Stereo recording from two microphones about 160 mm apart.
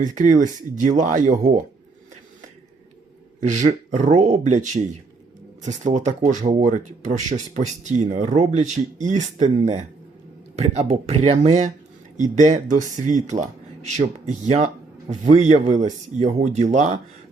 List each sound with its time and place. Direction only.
0.0 s speech: 50° right (ahead or behind)
3.4 s speech: 45° right (ahead or behind)
12.1 s speech: 50° right (ahead or behind)